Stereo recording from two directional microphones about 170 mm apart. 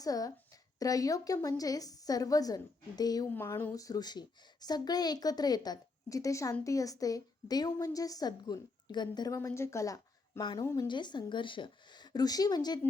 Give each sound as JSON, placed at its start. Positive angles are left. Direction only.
{"t": 0.0, "sound": "a woman's voice", "side_deg": 20}